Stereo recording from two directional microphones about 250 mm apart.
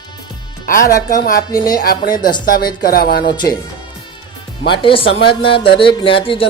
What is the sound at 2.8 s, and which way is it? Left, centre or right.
Speech, left.